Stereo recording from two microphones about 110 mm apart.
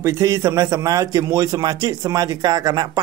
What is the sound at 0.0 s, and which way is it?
A man's voice, 30° right (ahead or behind).